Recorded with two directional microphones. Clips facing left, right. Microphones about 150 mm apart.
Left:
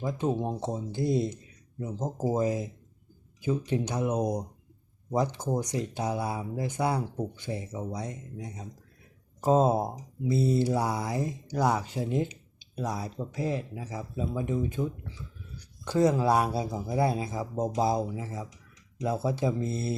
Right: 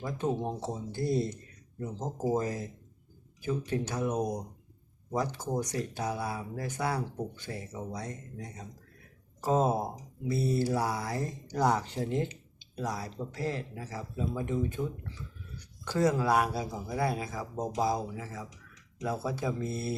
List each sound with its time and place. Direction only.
0.0 s speech: 20° left (ahead or behind)
15.8 s speech: 20° left (ahead or behind)